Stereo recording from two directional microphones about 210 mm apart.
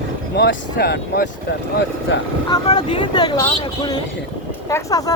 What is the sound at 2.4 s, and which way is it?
Speech, 20° left (ahead or behind).